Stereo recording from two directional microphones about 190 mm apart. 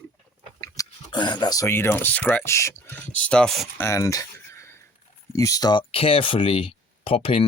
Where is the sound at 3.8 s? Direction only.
15° left (ahead or behind).